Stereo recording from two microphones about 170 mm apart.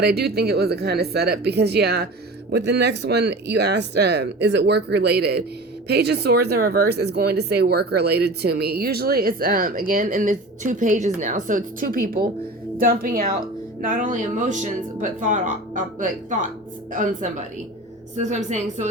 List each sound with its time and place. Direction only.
0.0 s speech: 70° right (ahead or behind); by 18.9 s 45° right (ahead or behind)